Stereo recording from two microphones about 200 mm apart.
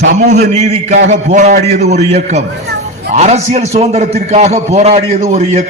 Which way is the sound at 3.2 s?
35° right (ahead or behind).